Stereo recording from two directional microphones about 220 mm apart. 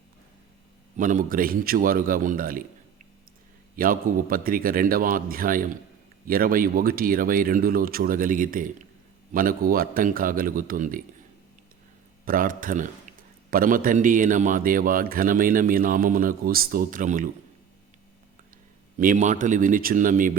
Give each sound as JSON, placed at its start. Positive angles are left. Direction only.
{"t": 0.9, "sound": "a man's voice", "side_deg": -35}
{"t": 3.8, "sound": "a man's voice", "side_deg": -40}
{"t": 12.2, "sound": "a man's voice", "side_deg": -40}
{"t": 18.9, "sound": "a man's voice", "side_deg": -35}